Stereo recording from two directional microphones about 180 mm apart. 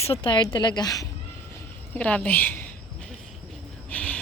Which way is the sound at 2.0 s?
5° left (ahead or behind).